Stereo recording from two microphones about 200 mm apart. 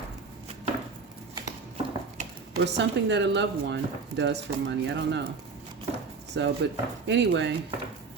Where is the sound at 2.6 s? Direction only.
60° right (ahead or behind).